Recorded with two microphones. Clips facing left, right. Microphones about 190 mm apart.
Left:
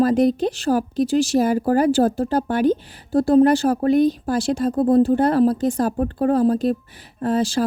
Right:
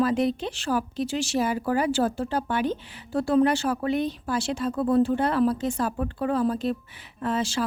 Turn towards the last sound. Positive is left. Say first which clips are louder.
# left 7 dB
turn(degrees=35)  # may be behind; listen again after turning